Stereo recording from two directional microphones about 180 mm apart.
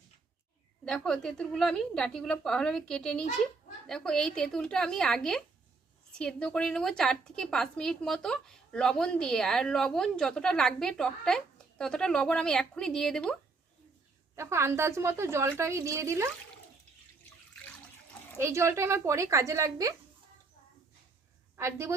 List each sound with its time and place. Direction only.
0.9 s a woman's voice: 5° left (ahead or behind)
14.3 s a woman's voice: 15° right (ahead or behind)
18.3 s a woman's voice: 15° right (ahead or behind)
21.5 s a woman's voice: 15° right (ahead or behind)